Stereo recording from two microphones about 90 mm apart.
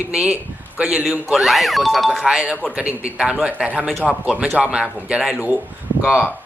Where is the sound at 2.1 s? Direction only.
10° right (ahead or behind).